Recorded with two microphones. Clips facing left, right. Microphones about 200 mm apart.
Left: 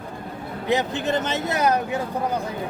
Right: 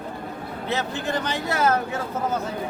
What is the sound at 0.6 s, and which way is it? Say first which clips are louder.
Speech: left 5 dB; 15° left (ahead or behind).